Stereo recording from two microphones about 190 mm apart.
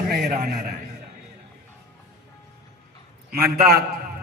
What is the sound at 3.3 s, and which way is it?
Speech, 55° right (ahead or behind).